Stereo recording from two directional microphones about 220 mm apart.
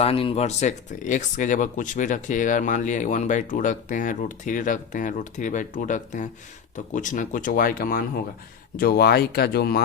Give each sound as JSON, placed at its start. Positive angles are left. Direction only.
{"t": 0.0, "sound": "speech", "side_deg": 25}